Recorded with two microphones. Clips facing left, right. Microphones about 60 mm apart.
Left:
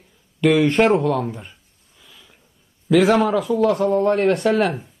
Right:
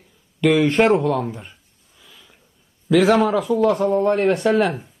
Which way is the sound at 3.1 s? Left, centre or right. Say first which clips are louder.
Right 1 dB; centre.